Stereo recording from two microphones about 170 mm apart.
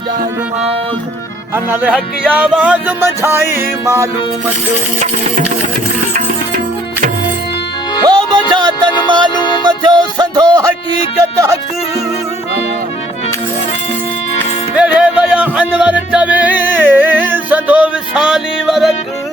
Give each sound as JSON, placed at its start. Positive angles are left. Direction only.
{"t": 1.5, "sound": "music", "side_deg": -10}
{"t": 8.0, "sound": "music", "side_deg": -25}
{"t": 8.9, "sound": "music", "side_deg": 25}
{"t": 9.6, "sound": "music", "side_deg": -25}
{"t": 14.8, "sound": "music", "side_deg": -5}